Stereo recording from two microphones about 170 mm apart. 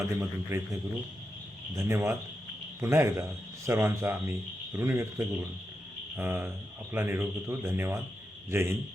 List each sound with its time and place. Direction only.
0.2 s speech: 15° right (ahead or behind)